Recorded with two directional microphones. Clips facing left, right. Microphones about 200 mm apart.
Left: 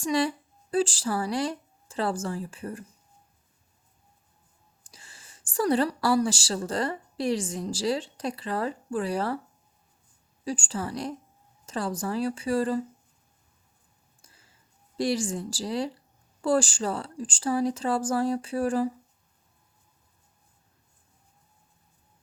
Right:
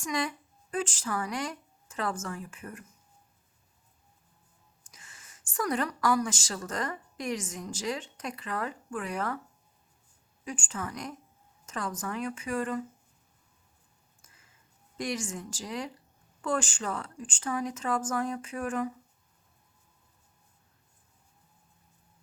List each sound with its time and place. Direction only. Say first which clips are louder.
0.0 s a woman's voice: left 7 dB; 30° left (ahead or behind)
4.8 s a woman's voice: left 3 dB; 30° left (ahead or behind)
10.4 s speech: left 6 dB; 35° left (ahead or behind)
14.2 s a sound: left 3 dB; 30° left (ahead or behind)
16.4 s speech: left 7 dB; 35° left (ahead or behind)